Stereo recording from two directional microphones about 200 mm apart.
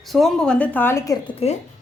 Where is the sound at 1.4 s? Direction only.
30° left (ahead or behind).